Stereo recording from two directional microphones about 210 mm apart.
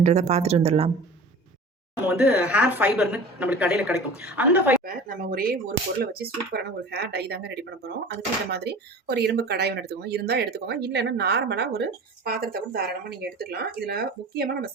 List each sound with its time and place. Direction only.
0.0 s speech: 35° right (ahead or behind)
2.0 s a woman's voice: 10° right (ahead or behind)
4.8 s speech: 45° right (ahead or behind)